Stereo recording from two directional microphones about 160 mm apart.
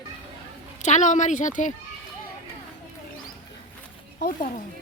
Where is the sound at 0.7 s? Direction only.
50° left (ahead or behind).